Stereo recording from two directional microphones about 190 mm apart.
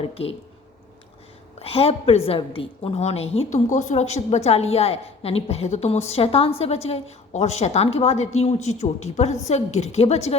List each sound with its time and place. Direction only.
0.0 s a woman's voice: 30° left (ahead or behind)
1.5 s a woman's voice: 30° left (ahead or behind)